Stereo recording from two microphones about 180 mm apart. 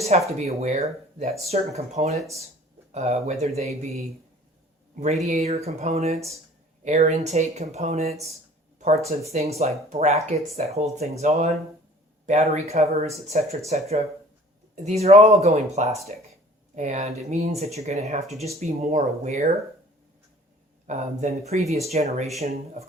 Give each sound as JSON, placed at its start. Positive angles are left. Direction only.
{"t": 0.3, "sound": "speech", "side_deg": -40}
{"t": 5.2, "sound": "speech", "side_deg": -35}
{"t": 20.8, "sound": "speech", "side_deg": -45}